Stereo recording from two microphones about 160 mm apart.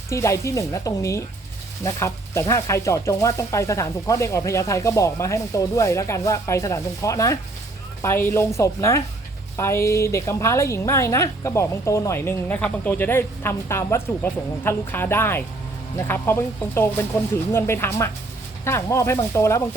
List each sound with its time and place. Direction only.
0.1 s a woman's voice: 20° left (ahead or behind)